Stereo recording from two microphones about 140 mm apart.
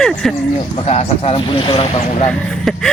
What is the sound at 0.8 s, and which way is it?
Speech, 50° left (ahead or behind).